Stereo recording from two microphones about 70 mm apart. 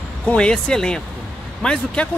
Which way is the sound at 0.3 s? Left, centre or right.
Centre.